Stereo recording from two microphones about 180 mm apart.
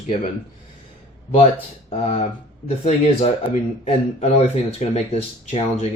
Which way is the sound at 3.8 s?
35° left (ahead or behind).